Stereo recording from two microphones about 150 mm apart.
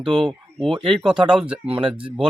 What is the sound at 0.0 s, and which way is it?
Speech, centre (ahead or behind).